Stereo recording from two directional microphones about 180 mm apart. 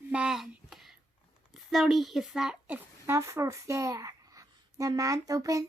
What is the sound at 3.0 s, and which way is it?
A woman's voice, 15° right (ahead or behind).